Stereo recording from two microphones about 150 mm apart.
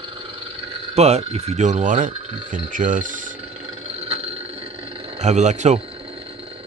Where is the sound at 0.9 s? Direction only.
45° right (ahead or behind); by 3.3 s 60° right (ahead or behind).